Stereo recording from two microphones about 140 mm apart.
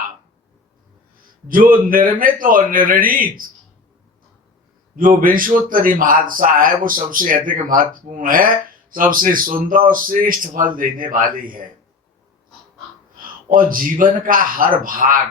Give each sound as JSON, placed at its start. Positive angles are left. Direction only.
{"t": 1.5, "sound": "a man's voice", "side_deg": -80}
{"t": 4.9, "sound": "a man's voice", "side_deg": -80}
{"t": 13.5, "sound": "a man's voice", "side_deg": -80}